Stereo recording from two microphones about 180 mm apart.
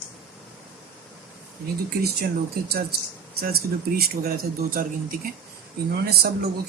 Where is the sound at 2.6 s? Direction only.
60° right (ahead or behind).